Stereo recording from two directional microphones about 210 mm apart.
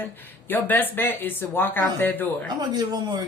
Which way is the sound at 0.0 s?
10° left (ahead or behind).